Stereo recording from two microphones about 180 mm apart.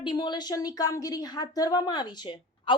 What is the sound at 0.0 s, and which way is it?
A woman's voice, 25° left (ahead or behind).